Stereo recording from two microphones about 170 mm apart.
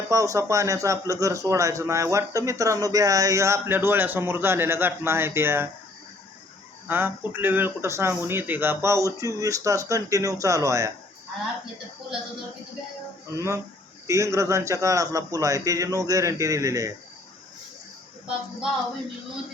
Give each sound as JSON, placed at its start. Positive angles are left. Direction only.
{"t": 0.1, "sound": "a man's voice", "side_deg": -20}
{"t": 6.8, "sound": "a man's voice", "side_deg": -10}
{"t": 13.3, "sound": "a man's voice", "side_deg": -15}